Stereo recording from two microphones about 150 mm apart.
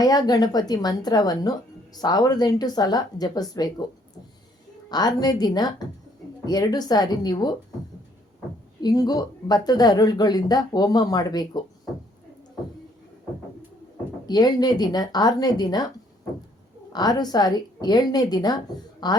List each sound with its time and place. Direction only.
0.0 s speech: 25° left (ahead or behind)
4.9 s speech: 25° left (ahead or behind)
8.8 s speech: 25° left (ahead or behind)
14.3 s speech: 25° left (ahead or behind)
16.9 s speech: 25° left (ahead or behind)